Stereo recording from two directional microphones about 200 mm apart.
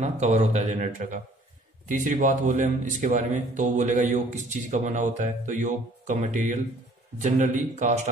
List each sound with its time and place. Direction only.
0.0 s speech: 35° right (ahead or behind)